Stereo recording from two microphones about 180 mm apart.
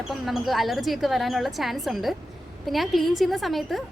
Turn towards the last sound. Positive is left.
turn(degrees=0)  # may be behind; listen again after turning